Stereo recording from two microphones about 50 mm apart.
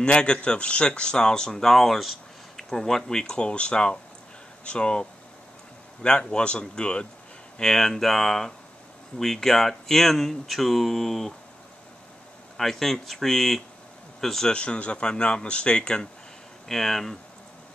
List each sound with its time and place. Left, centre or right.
0.0 s speech: centre
6.0 s speech: centre
12.5 s speech: centre
14.5 s speech: left
16.6 s speech: centre